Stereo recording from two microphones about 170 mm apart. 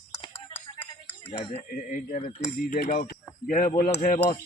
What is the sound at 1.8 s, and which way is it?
Speech, 50° left (ahead or behind).